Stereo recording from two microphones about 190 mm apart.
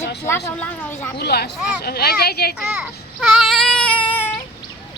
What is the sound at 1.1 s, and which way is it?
Speech, 60° left (ahead or behind).